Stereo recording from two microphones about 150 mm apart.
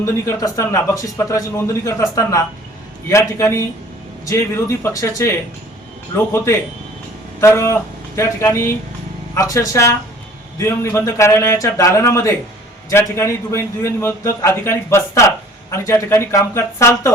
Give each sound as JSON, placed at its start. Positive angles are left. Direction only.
{"t": 0.0, "sound": "a man's voice", "side_deg": 20}